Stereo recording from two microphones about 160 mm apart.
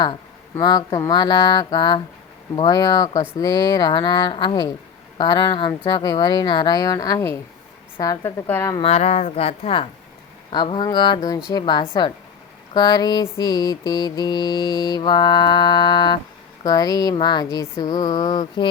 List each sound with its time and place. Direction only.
0.5 s mantra: 25° left (ahead or behind)
8.8 s a woman's voice: 40° left (ahead or behind)
10.5 s mantra: 30° left (ahead or behind)